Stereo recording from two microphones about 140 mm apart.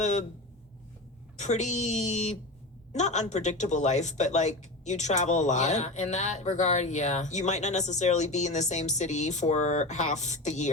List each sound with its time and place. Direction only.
0.0 s speech: 55° left (ahead or behind)
1.4 s speech: 55° left (ahead or behind)